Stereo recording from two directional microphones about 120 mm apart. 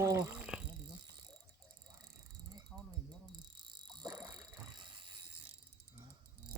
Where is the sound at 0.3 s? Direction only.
5° right (ahead or behind).